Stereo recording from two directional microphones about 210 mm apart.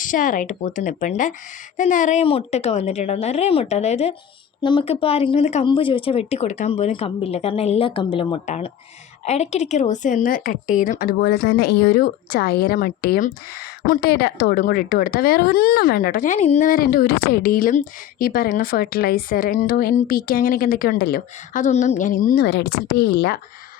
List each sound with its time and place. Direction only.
0.0 s a woman's voice: 40° left (ahead or behind)